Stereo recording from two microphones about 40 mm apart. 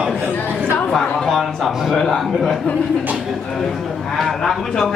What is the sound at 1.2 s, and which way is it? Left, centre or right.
Speech, centre.